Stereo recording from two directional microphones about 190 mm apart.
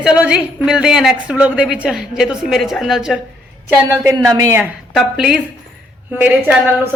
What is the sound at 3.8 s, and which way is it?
Speech, 15° right (ahead or behind).